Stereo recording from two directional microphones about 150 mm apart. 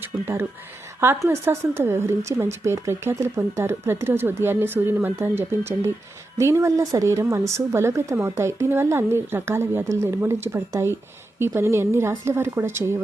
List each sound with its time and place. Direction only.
1.0 s speech: 15° right (ahead or behind)